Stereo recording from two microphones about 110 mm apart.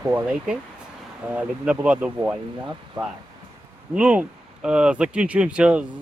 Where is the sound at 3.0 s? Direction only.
45° right (ahead or behind).